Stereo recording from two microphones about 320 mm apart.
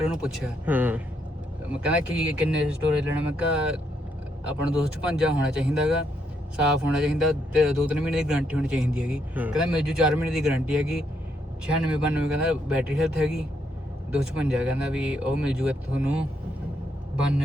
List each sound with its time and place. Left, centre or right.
0.1 s speech: centre